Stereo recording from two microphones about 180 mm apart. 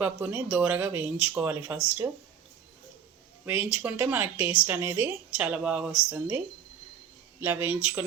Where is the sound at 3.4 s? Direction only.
10° right (ahead or behind).